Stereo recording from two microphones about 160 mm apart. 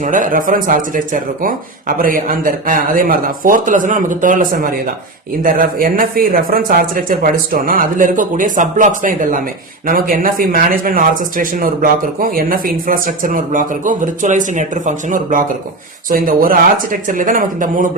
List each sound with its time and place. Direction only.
0.0 s speech: 55° right (ahead or behind)